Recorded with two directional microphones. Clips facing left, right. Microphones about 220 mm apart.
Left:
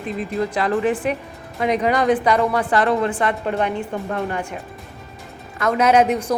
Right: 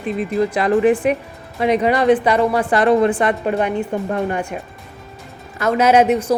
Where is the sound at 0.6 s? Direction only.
15° right (ahead or behind).